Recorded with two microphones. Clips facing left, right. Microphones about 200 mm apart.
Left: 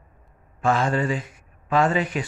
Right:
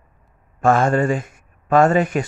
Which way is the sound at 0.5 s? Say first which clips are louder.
Right 6 dB; 50° right (ahead or behind).